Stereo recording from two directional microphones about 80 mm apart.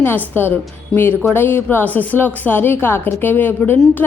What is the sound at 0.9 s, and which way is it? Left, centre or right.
Speech, centre.